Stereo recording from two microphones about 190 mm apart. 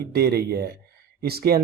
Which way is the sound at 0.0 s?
55° right (ahead or behind).